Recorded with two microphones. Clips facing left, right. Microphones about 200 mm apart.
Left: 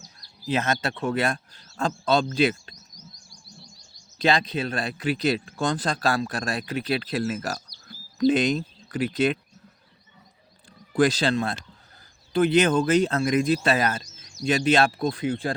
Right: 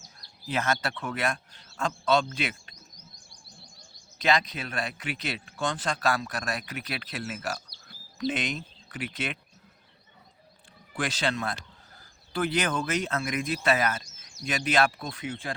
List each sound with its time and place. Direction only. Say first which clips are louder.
0.4 s speech: left 4 dB; 20° left (ahead or behind)
2.7 s chirp: left 4 dB; 55° right (ahead or behind)
4.2 s speech: left 4 dB; 30° left (ahead or behind)
10.9 s speech: left 9 dB; 35° left (ahead or behind)